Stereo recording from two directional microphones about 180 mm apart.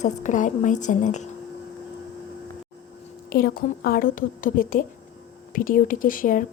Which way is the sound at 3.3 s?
55° left (ahead or behind).